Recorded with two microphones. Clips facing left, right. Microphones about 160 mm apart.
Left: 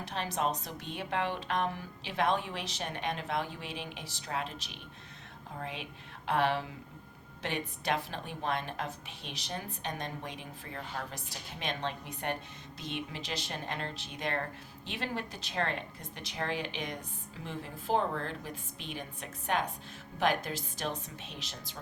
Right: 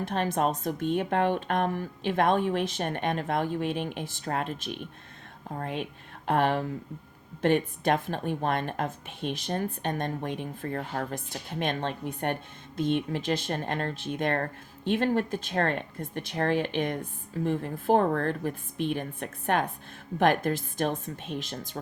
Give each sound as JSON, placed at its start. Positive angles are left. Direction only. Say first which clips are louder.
{"t": 0.0, "sound": "a woman's voice", "louder": "right 7 dB", "side_deg": -50}